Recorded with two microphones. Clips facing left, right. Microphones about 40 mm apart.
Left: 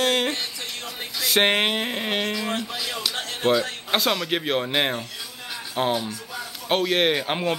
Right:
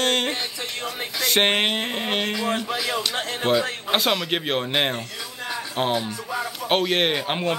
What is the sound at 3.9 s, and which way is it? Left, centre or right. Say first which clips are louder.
A man's voice: even; centre.